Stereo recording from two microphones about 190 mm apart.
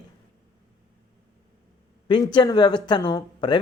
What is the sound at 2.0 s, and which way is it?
Speech, 25° left (ahead or behind).